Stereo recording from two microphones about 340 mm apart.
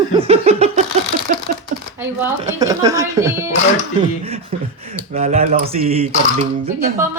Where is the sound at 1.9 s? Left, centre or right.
Centre.